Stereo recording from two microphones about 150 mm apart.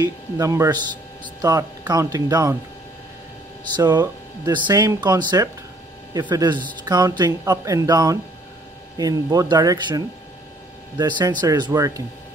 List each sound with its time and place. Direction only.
0.0 s speech: 20° right (ahead or behind)
3.9 s speech: 25° right (ahead or behind)